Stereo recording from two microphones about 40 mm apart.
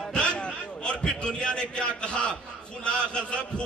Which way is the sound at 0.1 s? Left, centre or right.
Left.